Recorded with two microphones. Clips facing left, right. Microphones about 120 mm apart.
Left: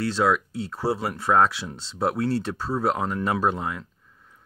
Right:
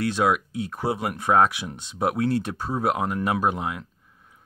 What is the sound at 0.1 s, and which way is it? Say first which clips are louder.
Speech: even; 15° right (ahead or behind).